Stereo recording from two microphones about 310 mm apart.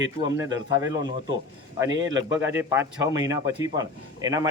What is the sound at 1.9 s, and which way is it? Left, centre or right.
Speech, right.